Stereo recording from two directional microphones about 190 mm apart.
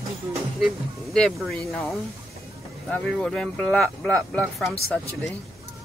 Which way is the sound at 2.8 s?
5° left (ahead or behind).